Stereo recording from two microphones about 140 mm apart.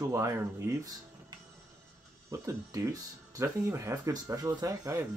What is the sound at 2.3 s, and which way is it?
Speech, 25° right (ahead or behind).